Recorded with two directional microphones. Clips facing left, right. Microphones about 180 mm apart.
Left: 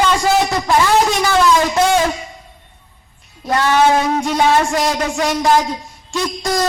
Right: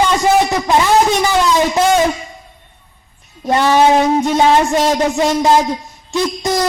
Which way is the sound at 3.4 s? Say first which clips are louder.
Right 2 dB; 20° right (ahead or behind).